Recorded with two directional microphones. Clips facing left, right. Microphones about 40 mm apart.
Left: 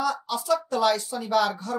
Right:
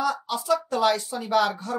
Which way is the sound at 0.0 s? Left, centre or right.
Right.